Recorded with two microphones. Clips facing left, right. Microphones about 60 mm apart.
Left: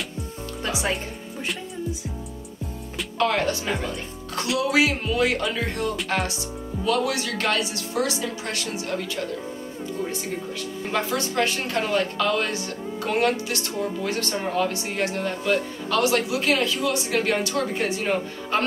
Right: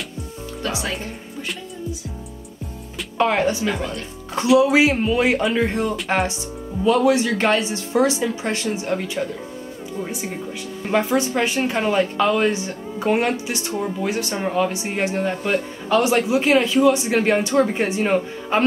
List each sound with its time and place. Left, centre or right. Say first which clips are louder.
3.2 s a woman's voice: right 4 dB; centre
10.9 s a woman's voice: right 7 dB; right